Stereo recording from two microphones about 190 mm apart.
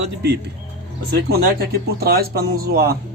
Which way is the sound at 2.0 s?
55° right (ahead or behind).